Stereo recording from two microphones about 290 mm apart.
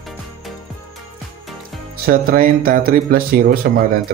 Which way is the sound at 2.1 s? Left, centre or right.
Right.